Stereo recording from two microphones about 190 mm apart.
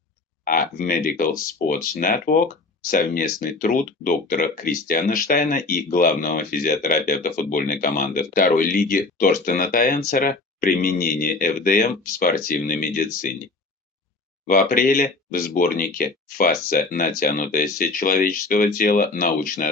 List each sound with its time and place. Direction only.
0.4 s speech: 50° left (ahead or behind)
14.4 s speech: 45° left (ahead or behind)